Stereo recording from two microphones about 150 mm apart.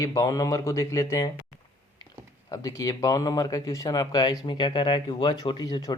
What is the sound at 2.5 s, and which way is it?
Speech, 20° left (ahead or behind).